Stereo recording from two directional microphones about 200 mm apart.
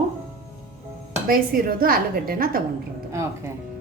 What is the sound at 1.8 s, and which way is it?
Speech, 45° right (ahead or behind).